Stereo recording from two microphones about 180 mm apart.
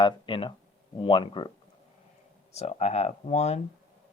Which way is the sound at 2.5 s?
35° left (ahead or behind).